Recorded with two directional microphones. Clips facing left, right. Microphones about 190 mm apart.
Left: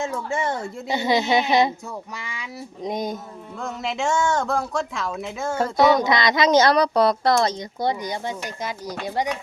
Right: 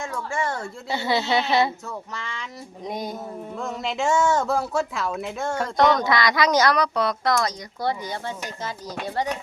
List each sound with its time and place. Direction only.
0.0 s a woman's voice: 20° left (ahead or behind)
3.6 s a woman's voice: centre (ahead or behind)
6.1 s a woman's voice: 20° left (ahead or behind)